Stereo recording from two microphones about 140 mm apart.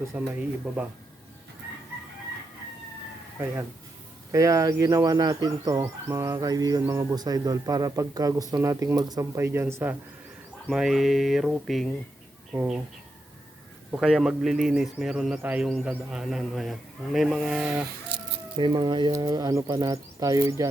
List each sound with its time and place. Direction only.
0.1 s speech: 10° right (ahead or behind)
4.3 s speech: 25° right (ahead or behind)
10.7 s a man's voice: 5° right (ahead or behind)
13.9 s a man's voice: 5° right (ahead or behind)
18.5 s speech: 30° right (ahead or behind)